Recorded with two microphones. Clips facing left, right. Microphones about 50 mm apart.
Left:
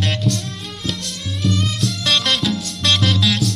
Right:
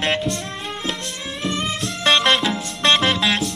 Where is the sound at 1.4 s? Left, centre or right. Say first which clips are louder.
Left 3 dB; right.